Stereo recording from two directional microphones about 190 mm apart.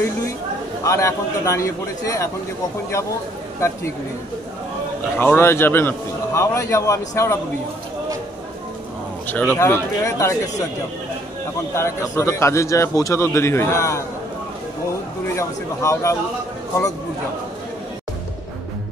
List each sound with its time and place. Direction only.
0.8 s a man's voice: 15° left (ahead or behind)
5.2 s a man's voice: 10° left (ahead or behind)
9.3 s a man's voice: 10° left (ahead or behind)
11.7 s a man's voice: 15° left (ahead or behind)
15.3 s a man's voice: 15° left (ahead or behind)